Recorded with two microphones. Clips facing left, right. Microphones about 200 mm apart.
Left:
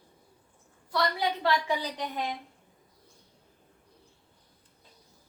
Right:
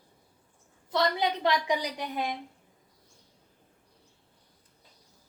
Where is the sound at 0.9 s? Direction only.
20° right (ahead or behind).